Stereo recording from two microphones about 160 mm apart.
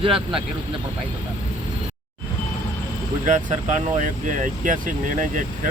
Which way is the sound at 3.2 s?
50° right (ahead or behind).